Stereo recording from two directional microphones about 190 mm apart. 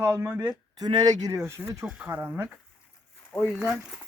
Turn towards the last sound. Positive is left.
turn(degrees=0)  # may be behind; listen again after turning